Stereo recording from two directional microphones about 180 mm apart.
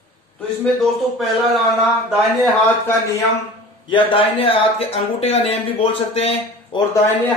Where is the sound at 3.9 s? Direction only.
25° left (ahead or behind).